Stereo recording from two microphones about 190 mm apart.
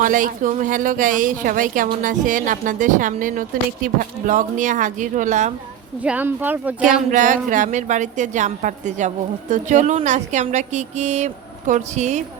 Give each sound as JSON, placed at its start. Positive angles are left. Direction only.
{"t": 0.0, "sound": "a woman's voice", "side_deg": -45}
{"t": 6.0, "sound": "a woman's voice", "side_deg": -10}
{"t": 7.1, "sound": "a woman's voice", "side_deg": -45}